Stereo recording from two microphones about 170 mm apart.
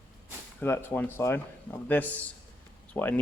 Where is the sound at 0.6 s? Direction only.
15° left (ahead or behind).